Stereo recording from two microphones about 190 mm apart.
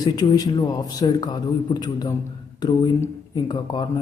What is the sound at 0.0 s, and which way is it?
A man's voice, 20° left (ahead or behind).